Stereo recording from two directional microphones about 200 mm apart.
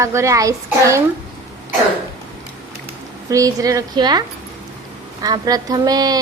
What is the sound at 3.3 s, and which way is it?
A woman's voice, 15° right (ahead or behind).